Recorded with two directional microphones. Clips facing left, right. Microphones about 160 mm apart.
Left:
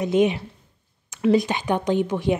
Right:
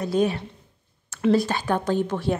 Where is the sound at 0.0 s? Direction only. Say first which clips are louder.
Left 3 dB; 20° left (ahead or behind).